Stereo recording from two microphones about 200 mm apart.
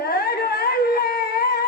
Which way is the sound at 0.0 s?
50° left (ahead or behind).